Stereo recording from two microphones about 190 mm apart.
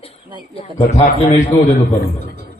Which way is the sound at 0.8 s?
35° left (ahead or behind).